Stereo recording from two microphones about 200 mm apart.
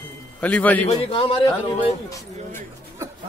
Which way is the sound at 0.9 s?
30° left (ahead or behind).